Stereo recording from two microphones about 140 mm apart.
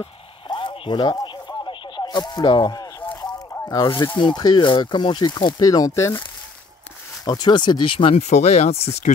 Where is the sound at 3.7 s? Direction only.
30° left (ahead or behind).